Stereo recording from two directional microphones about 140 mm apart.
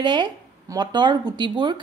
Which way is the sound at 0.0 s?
30° right (ahead or behind).